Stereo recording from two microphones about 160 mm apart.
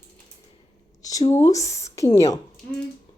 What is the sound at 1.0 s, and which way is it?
Speech, 20° left (ahead or behind).